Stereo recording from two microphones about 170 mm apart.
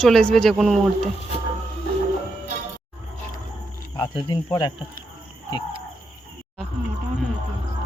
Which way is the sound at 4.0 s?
25° left (ahead or behind).